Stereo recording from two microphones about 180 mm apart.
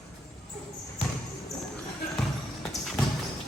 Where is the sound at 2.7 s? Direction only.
Centre (ahead or behind).